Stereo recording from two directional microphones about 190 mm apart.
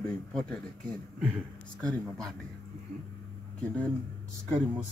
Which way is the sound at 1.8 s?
5° left (ahead or behind).